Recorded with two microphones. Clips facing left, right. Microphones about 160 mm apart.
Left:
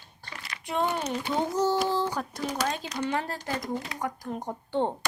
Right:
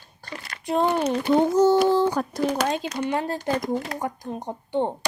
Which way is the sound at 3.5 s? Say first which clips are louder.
Right 4 dB; 60° right (ahead or behind).